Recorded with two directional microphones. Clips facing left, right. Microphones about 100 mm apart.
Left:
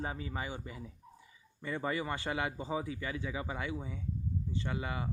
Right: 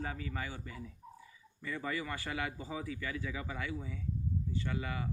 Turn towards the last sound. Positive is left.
turn(degrees=25)  # may be behind; listen again after turning